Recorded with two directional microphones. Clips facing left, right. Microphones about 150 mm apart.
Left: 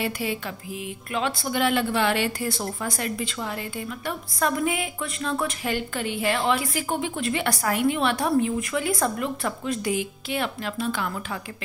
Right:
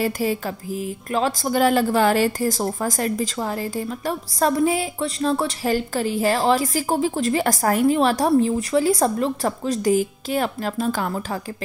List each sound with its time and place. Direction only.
0.0 s a woman's voice: 40° right (ahead or behind)